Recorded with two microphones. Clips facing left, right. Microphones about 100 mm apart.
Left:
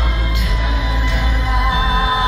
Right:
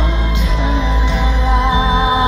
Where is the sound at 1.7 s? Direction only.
20° right (ahead or behind).